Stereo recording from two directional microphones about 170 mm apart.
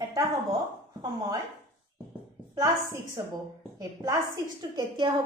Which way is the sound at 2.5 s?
20° right (ahead or behind).